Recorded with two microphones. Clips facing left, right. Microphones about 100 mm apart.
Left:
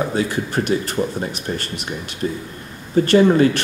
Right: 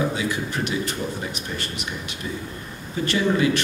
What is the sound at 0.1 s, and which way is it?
Speech, 45° left (ahead or behind).